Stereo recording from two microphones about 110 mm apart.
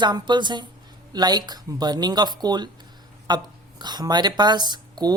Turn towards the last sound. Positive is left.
turn(degrees=-40)  # may be behind; listen again after turning